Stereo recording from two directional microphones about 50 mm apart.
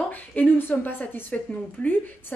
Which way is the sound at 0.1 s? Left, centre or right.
Left.